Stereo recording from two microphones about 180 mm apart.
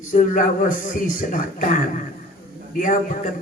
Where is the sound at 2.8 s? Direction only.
45° left (ahead or behind).